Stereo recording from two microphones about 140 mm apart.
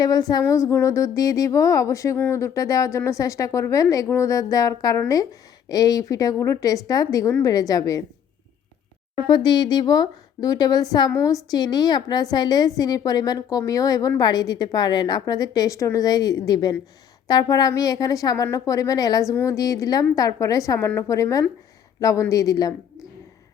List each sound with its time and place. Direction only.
0.0 s a woman's voice: 30° left (ahead or behind)
9.2 s a woman's voice: 30° left (ahead or behind)